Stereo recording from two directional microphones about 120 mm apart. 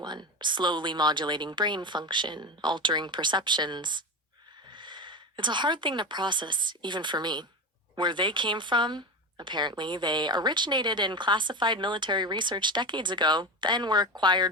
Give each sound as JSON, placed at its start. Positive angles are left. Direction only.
{"t": 0.0, "sound": "a woman's voice", "side_deg": -40}